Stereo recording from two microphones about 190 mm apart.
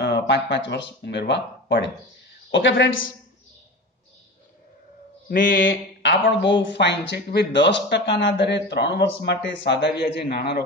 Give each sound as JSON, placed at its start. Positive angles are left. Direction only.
{"t": 0.0, "sound": "a woman's voice", "side_deg": 65}
{"t": 5.3, "sound": "speech", "side_deg": 45}
{"t": 5.7, "sound": "speech", "side_deg": 75}